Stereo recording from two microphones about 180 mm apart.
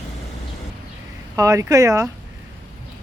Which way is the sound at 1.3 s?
15° right (ahead or behind).